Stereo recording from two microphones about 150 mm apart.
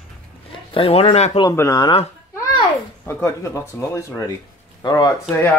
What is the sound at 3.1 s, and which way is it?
Speech, 15° left (ahead or behind).